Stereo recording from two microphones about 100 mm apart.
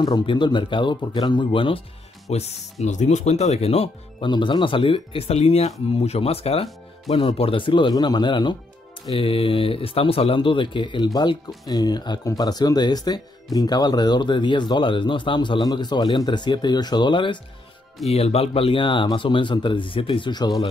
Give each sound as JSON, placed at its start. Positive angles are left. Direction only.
{"t": 0.0, "sound": "speech", "side_deg": 50}
{"t": 2.3, "sound": "speech", "side_deg": 90}
{"t": 4.3, "sound": "speech", "side_deg": 50}
{"t": 9.1, "sound": "speech", "side_deg": 65}
{"t": 18.1, "sound": "speech", "side_deg": 90}